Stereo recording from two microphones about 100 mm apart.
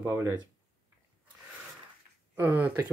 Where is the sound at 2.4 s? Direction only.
20° right (ahead or behind).